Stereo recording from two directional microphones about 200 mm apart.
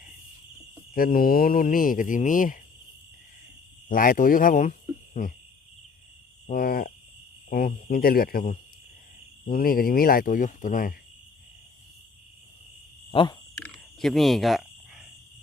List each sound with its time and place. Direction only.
0.9 s speech: 45° left (ahead or behind)
3.8 s speech: 45° left (ahead or behind)
5.2 s cricket: 35° left (ahead or behind)
6.5 s speech: 45° left (ahead or behind)
13.1 s a sound: 25° left (ahead or behind)
13.6 s a sound: centre (ahead or behind)